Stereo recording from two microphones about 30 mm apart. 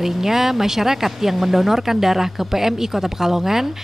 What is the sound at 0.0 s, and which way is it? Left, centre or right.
Speech, centre.